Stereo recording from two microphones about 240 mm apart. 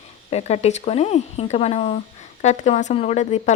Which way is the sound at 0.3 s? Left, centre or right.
Left.